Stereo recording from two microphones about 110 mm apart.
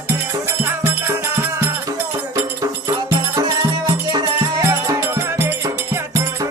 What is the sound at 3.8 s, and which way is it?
Music, 30° right (ahead or behind).